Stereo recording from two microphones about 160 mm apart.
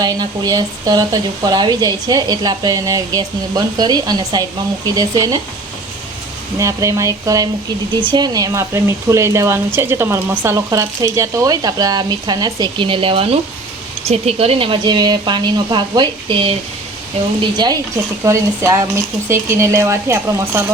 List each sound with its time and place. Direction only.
0.0 s speech: 25° right (ahead or behind)
6.6 s speech: 20° right (ahead or behind)